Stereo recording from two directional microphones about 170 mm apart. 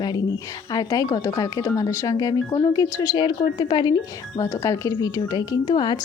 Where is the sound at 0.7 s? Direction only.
20° left (ahead or behind).